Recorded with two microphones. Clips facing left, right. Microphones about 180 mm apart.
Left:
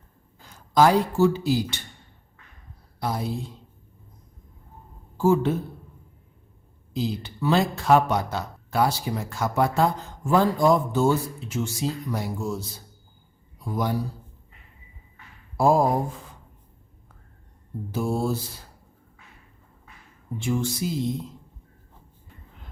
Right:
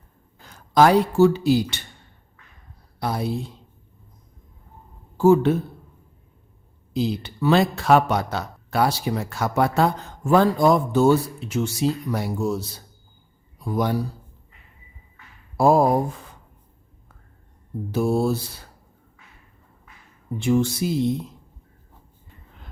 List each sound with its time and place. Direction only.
0.4 s a man's voice: 65° right (ahead or behind)
3.0 s speech: 65° right (ahead or behind)
5.1 s speech: 70° right (ahead or behind)
6.9 s speech: 70° right (ahead or behind)
15.5 s speech: 65° right (ahead or behind)
17.9 s speech: 70° right (ahead or behind)
20.4 s speech: 70° right (ahead or behind)